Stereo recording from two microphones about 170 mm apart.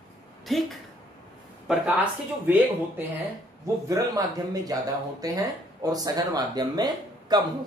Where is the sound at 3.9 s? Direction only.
20° right (ahead or behind).